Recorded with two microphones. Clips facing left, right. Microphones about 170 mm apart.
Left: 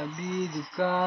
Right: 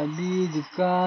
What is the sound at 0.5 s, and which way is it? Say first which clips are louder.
Mantra: right 4 dB; 20° right (ahead or behind).